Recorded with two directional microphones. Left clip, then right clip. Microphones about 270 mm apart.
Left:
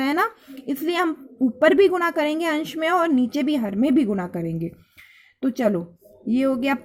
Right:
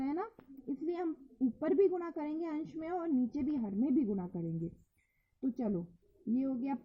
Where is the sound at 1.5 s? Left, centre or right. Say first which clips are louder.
Left 15 dB; left.